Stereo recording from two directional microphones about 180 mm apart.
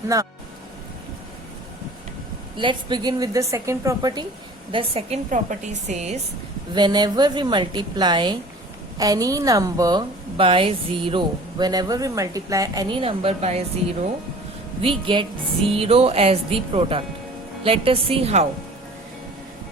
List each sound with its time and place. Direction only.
0.1 s speech: 15° right (ahead or behind)
2.6 s a woman's voice: 25° right (ahead or behind)
6.7 s a woman's voice: 25° right (ahead or behind)
14.8 s a woman's voice: 30° right (ahead or behind)